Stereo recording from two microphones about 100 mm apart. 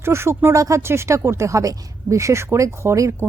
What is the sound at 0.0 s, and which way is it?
Speech, 25° right (ahead or behind).